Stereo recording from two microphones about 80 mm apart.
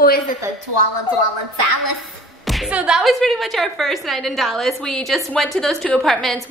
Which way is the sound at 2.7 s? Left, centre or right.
Centre.